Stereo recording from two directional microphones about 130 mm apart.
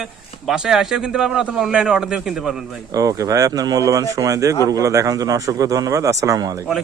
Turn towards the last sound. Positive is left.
turn(degrees=-25)  # may be behind; listen again after turning